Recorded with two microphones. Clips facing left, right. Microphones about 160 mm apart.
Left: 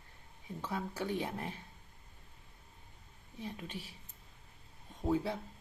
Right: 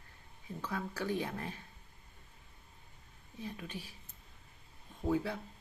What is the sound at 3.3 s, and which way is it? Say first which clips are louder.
Speech: even; 20° left (ahead or behind).